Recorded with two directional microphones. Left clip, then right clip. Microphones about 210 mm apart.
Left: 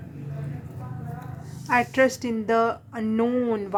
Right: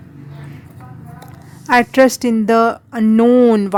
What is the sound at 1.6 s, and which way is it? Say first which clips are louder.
A woman's voice: right 9 dB; 50° right (ahead or behind).